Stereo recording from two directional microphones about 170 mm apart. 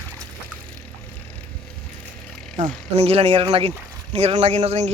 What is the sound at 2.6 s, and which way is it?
Speech, 35° right (ahead or behind).